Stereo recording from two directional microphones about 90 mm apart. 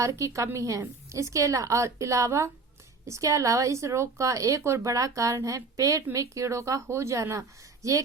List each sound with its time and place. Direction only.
0.0 s speech: 35° right (ahead or behind)